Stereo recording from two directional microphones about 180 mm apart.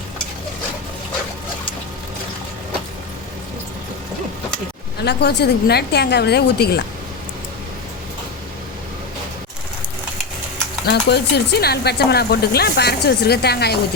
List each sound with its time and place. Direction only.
5.0 s speech: 65° left (ahead or behind)
10.8 s speech: 65° left (ahead or behind)